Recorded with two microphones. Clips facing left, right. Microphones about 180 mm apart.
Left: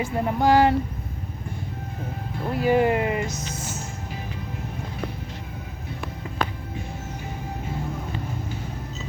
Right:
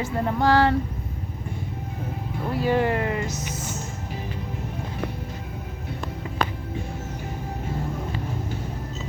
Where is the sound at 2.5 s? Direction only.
15° left (ahead or behind).